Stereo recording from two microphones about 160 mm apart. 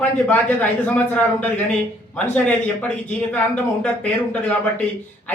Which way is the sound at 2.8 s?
10° left (ahead or behind).